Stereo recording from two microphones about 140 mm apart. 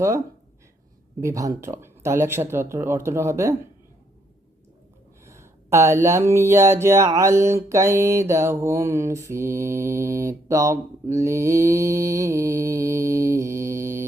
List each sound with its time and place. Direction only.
1.2 s speech: 25° right (ahead or behind)
5.2 s speech: 20° right (ahead or behind)